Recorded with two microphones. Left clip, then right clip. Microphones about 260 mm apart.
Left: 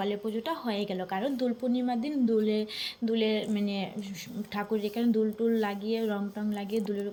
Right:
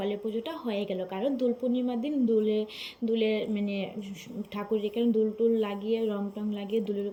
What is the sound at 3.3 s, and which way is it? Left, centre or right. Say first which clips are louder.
Speech: right 1 dB; left.